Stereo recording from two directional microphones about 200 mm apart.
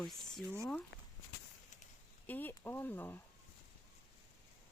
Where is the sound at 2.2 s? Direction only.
10° left (ahead or behind).